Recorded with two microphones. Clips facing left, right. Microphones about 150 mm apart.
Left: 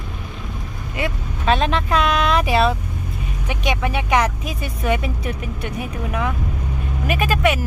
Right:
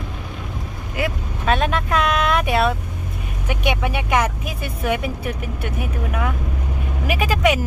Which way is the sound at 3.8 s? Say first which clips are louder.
Left 4 dB; 5° right (ahead or behind).